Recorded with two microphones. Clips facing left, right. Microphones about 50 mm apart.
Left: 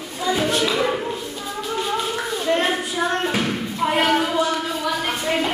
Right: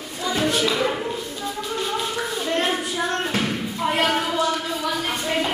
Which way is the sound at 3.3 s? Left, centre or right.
Centre.